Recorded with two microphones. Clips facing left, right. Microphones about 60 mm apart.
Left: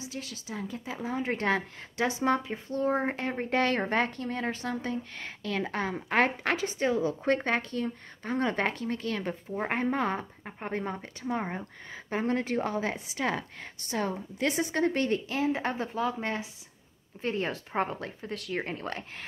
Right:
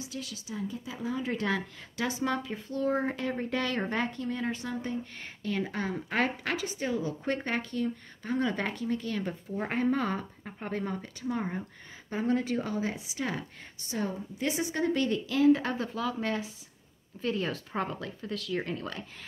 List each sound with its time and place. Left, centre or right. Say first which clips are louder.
0.1 s speech: even; left
0.9 s speech: left 2 dB; left
2.0 s speech: left 4 dB; left
5.6 s speech: left 3 dB; left
9.8 s speech: even; left
12.1 s speech: even; left